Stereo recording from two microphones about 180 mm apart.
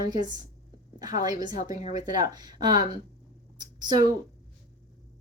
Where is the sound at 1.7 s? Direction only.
45° left (ahead or behind).